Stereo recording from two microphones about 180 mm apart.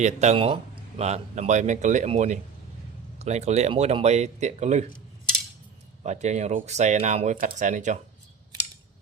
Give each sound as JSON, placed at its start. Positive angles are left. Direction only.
{"t": 0.0, "sound": "speech", "side_deg": -40}
{"t": 6.0, "sound": "speech", "side_deg": -40}